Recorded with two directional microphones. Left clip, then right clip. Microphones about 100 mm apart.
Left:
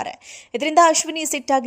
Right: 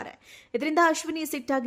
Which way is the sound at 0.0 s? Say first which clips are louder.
Left 11 dB; 25° left (ahead or behind).